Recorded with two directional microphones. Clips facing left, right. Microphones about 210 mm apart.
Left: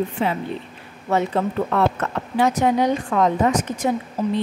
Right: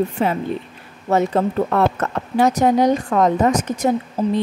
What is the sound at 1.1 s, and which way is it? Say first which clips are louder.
Speech: right 3 dB; 40° right (ahead or behind).